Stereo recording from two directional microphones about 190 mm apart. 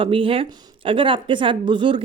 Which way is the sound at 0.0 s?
25° right (ahead or behind).